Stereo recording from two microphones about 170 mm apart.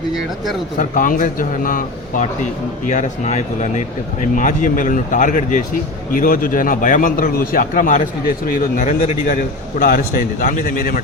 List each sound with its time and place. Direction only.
0.8 s a man's voice: 55° left (ahead or behind)